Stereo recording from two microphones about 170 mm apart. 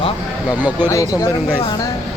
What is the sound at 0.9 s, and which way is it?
Speech, 20° left (ahead or behind).